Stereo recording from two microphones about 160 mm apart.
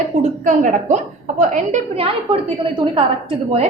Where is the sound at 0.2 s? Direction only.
50° right (ahead or behind).